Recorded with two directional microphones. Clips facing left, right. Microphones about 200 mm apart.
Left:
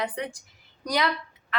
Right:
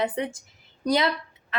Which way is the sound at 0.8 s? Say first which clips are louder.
Right 4 dB; 25° right (ahead or behind).